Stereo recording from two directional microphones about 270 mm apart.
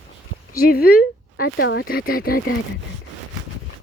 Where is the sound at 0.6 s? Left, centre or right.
Left.